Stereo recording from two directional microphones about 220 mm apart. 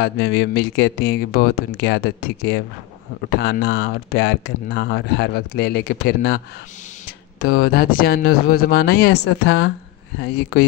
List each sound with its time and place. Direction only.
0.0 s speech: 50° left (ahead or behind)